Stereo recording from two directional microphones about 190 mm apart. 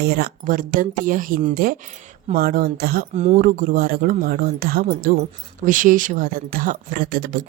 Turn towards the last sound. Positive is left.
turn(degrees=-50)  # may be behind; listen again after turning